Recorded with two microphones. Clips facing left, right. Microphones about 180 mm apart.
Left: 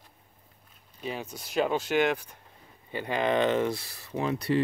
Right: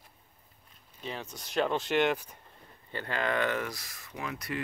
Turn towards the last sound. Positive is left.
turn(degrees=30)  # may be behind; listen again after turning